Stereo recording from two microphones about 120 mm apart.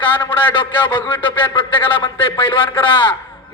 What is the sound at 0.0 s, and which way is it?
A man's voice, 45° left (ahead or behind).